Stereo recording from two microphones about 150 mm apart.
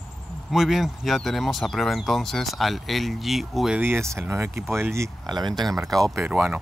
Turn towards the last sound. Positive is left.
turn(degrees=-10)  # may be behind; listen again after turning